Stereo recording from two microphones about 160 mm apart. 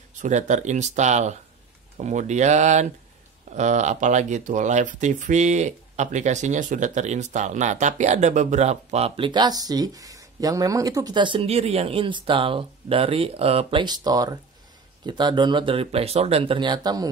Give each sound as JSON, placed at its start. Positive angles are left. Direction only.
{"t": 0.2, "sound": "speech", "side_deg": -45}